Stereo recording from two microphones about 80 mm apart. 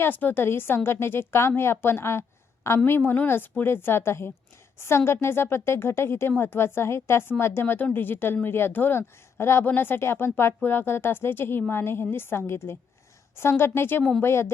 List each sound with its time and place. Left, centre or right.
0.0 s a woman's voice: left